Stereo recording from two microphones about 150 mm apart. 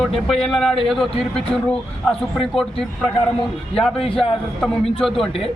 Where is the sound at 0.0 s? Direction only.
Centre (ahead or behind).